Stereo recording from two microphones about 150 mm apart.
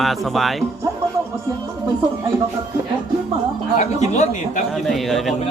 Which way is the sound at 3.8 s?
50° left (ahead or behind).